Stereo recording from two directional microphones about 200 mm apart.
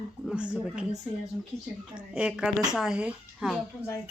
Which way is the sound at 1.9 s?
5° right (ahead or behind).